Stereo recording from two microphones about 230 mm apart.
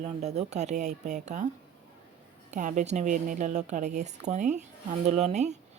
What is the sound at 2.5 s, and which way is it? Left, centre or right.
A woman's voice, right.